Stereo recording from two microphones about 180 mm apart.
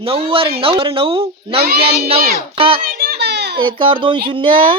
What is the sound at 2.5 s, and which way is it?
Speech, 30° right (ahead or behind).